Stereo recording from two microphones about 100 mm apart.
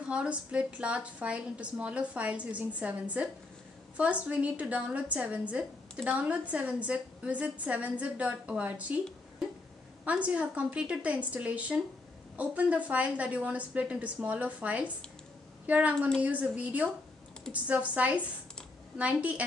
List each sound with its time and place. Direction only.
0.1 s a woman's voice: 10° right (ahead or behind)
10.0 s a woman's voice: 15° right (ahead or behind)